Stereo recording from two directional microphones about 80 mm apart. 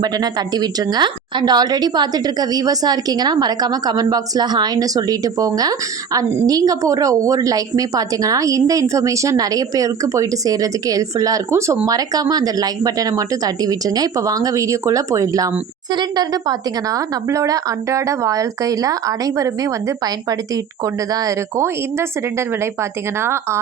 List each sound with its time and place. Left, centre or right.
0.0 s a woman's voice: right
11.9 s speech: right
15.9 s speech: right